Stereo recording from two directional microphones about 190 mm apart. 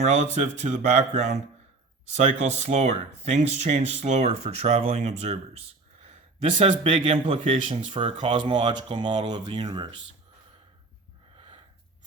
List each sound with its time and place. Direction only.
0.0 s speech: 35° right (ahead or behind)
11.3 s wheeze: 30° right (ahead or behind)